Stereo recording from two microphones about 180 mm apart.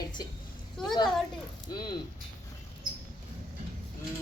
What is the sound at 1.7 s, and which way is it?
Speech, 25° left (ahead or behind).